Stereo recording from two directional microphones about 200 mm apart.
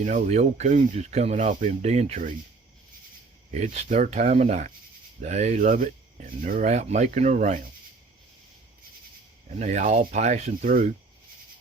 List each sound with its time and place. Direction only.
0.0 s speech: 40° right (ahead or behind)
3.5 s speech: 35° right (ahead or behind)
9.6 s speech: 35° right (ahead or behind)